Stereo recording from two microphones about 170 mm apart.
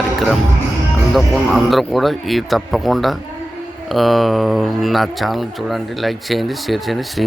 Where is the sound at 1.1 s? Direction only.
Centre (ahead or behind).